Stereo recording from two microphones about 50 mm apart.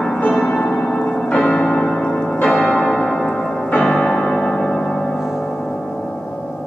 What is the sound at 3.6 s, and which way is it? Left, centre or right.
Music, left.